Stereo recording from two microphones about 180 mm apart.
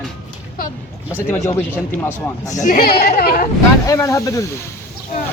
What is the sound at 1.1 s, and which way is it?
A man's voice, 10° left (ahead or behind).